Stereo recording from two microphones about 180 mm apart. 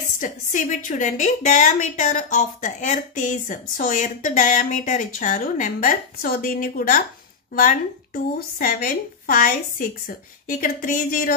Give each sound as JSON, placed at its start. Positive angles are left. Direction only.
{"t": 0.2, "sound": "a woman's voice", "side_deg": 45}